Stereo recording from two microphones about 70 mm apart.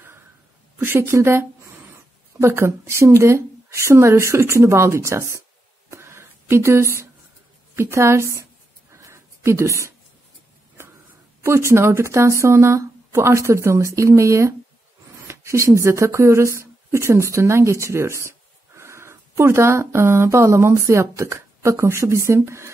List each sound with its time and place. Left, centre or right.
0.7 s a woman's voice: right
1.0 s a woman's voice: right
5.9 s a sound: right
7.7 s a woman's voice: right
8.9 s a sound: right
11.4 s speech: right